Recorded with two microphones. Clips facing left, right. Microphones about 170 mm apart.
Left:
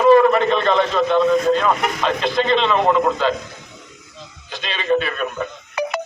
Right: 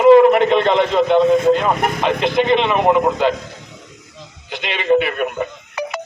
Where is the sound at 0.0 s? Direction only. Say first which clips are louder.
Right 3 dB; 20° right (ahead or behind).